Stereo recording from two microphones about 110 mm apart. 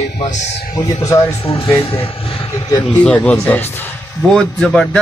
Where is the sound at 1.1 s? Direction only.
30° left (ahead or behind).